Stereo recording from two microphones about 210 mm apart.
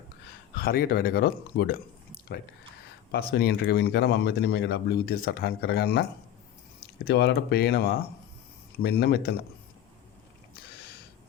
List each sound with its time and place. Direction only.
0.5 s speech: 45° left (ahead or behind)
3.1 s speech: 50° left (ahead or behind)
7.1 s speech: 50° left (ahead or behind)